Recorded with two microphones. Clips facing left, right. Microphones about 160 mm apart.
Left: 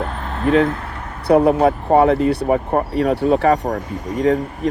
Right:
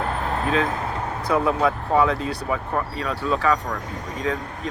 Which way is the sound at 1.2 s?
65° left (ahead or behind).